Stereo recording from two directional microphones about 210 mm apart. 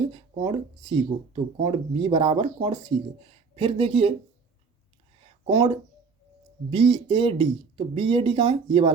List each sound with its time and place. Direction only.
0.0 s speech: 25° right (ahead or behind)
5.5 s speech: 20° right (ahead or behind)